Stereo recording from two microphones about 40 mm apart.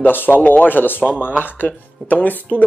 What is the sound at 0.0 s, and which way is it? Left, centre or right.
Speech, left.